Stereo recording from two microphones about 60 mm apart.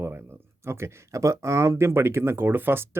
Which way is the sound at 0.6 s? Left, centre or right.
Right.